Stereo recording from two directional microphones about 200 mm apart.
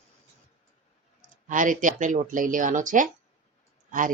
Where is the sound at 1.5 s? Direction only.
40° right (ahead or behind).